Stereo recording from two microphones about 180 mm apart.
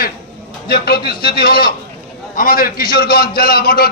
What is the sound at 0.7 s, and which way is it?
Speech, 60° left (ahead or behind).